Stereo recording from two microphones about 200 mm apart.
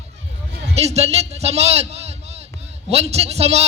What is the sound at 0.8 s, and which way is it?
A man's voice, 30° right (ahead or behind).